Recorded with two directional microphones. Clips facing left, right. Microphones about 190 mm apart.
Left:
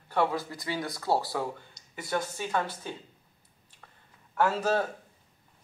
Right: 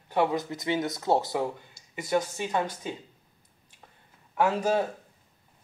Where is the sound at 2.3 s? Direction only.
10° right (ahead or behind).